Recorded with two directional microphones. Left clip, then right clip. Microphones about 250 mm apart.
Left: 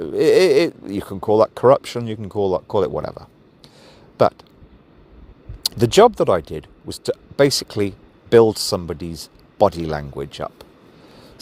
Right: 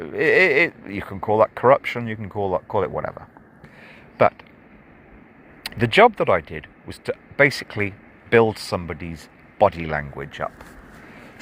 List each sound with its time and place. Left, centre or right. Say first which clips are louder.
0.0 s speech: left 3 dB; left
3.8 s a sound: left 1 dB; left
5.7 s speech: left 2 dB; left